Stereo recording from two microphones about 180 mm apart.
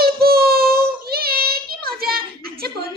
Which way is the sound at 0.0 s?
60° right (ahead or behind).